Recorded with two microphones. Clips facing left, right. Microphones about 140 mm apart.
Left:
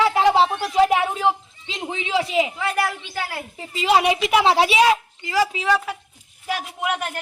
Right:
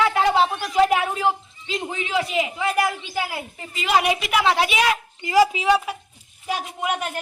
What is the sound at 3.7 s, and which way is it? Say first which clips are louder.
A woman's voice: left 2 dB; 30° left (ahead or behind).